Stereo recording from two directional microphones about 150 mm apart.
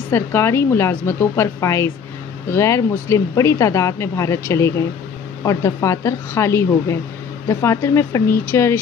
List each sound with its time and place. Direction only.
0.1 s a woman's voice: 15° left (ahead or behind)